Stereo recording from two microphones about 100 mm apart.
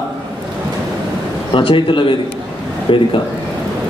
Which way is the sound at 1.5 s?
60° left (ahead or behind).